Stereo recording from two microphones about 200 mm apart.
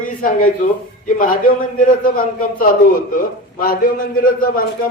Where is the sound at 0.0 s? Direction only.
45° left (ahead or behind).